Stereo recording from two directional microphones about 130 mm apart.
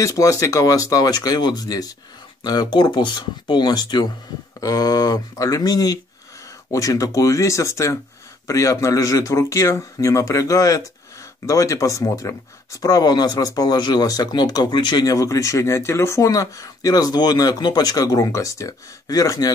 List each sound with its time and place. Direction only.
0.0 s speech: 25° left (ahead or behind)